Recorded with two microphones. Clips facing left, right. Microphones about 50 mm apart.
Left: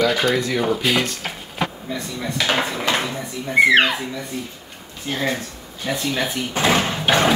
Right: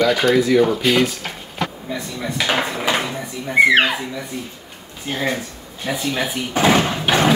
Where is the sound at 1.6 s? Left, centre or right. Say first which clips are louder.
Even; centre.